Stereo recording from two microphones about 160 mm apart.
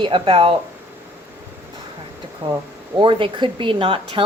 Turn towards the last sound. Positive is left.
turn(degrees=-35)  # may be behind; listen again after turning